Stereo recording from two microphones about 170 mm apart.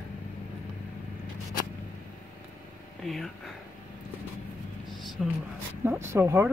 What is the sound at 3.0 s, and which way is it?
Speech, centre (ahead or behind).